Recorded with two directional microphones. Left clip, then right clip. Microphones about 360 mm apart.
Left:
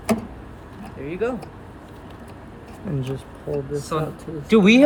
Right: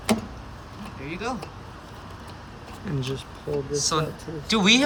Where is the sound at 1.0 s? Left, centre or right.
Centre.